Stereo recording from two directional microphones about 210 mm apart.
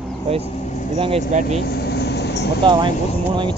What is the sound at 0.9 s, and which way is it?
Speech, 25° right (ahead or behind).